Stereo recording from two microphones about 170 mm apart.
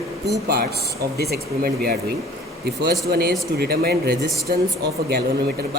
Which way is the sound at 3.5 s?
65° right (ahead or behind).